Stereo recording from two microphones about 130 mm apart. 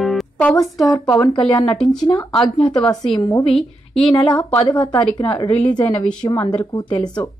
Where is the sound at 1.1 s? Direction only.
30° left (ahead or behind).